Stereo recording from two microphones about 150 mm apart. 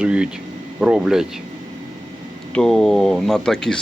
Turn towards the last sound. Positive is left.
turn(degrees=5)  # may be behind; listen again after turning